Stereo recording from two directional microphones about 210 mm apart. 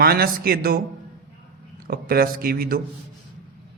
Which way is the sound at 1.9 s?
45° right (ahead or behind).